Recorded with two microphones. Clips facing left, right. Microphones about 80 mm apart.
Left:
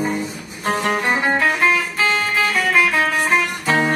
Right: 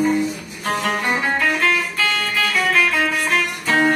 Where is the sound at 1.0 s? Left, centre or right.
Left.